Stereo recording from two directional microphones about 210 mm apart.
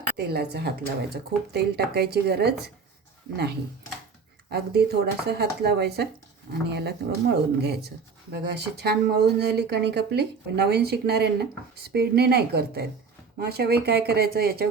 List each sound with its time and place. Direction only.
0.2 s speech: 50° right (ahead or behind)